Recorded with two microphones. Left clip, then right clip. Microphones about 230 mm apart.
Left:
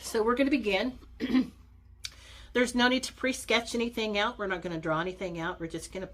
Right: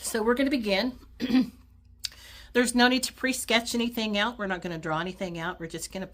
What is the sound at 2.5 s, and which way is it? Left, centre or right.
Speech, right.